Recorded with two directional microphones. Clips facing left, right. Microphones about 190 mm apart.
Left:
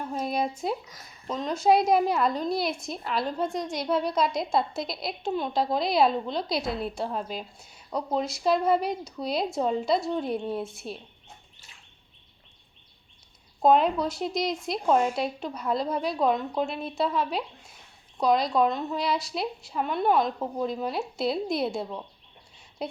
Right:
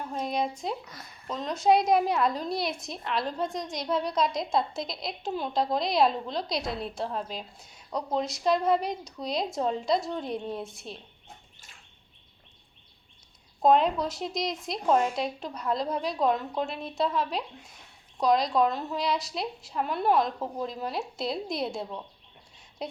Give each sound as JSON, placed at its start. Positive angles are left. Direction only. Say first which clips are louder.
{"t": 0.1, "sound": "a woman's voice", "louder": "left 1 dB", "side_deg": 5}
{"t": 13.6, "sound": "a woman's voice", "louder": "left 1 dB", "side_deg": 0}